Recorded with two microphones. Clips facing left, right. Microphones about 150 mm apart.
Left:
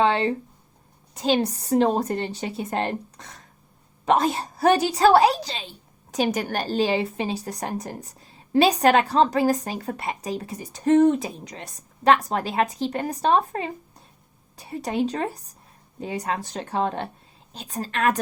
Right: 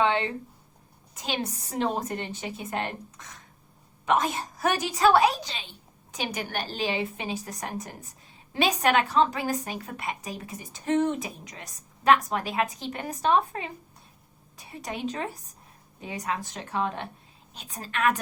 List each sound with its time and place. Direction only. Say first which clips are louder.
0.0 s a woman's voice: left 4 dB; 35° left (ahead or behind)